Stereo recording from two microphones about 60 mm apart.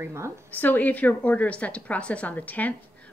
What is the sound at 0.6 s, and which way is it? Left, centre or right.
A woman's voice, left.